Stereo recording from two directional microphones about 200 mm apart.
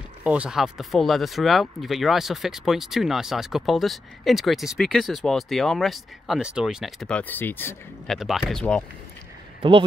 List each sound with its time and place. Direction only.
0.2 s speech: 5° right (ahead or behind); by 8.2 s 10° left (ahead or behind)
8.2 s speech: centre (ahead or behind)
9.6 s speech: 25° right (ahead or behind)